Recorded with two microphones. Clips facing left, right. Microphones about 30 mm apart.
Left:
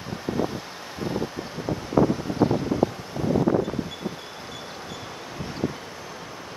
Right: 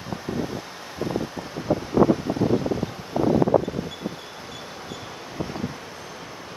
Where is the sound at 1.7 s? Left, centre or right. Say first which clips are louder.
Right 8 dB; centre.